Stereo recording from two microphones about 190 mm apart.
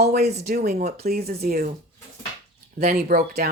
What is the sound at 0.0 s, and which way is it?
Speech, 55° right (ahead or behind).